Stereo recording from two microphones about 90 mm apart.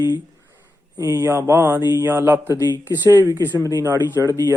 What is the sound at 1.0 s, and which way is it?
Speech, 40° right (ahead or behind).